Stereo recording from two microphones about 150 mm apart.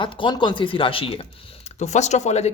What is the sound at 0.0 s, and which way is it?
Speech, 35° left (ahead or behind).